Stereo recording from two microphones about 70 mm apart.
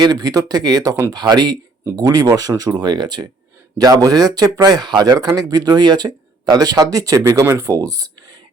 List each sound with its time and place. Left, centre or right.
0.0 s speech: right
1.1 s speech: right
2.0 s speech: right
3.8 s speech: right
5.3 s speech: right
7.2 s speech: right